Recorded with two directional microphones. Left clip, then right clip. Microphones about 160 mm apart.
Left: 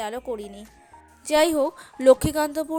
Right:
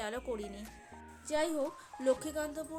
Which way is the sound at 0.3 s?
30° left (ahead or behind).